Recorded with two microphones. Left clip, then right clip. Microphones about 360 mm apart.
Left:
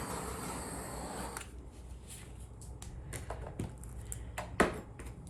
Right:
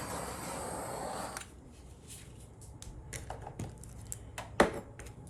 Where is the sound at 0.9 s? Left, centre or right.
Centre.